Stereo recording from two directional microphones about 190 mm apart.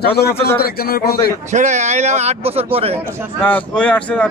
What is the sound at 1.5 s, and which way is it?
A man's voice, 35° right (ahead or behind).